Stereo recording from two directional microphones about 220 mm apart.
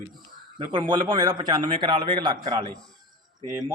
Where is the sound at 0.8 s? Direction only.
20° right (ahead or behind).